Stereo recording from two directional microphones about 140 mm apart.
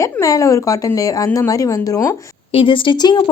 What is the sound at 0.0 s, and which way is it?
Speech, 20° left (ahead or behind).